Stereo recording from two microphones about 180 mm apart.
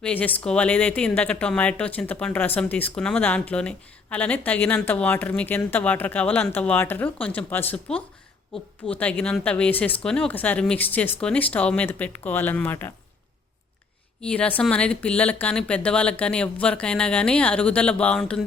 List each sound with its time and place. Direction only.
0.0 s speech: 10° left (ahead or behind)
14.2 s speech: 5° left (ahead or behind)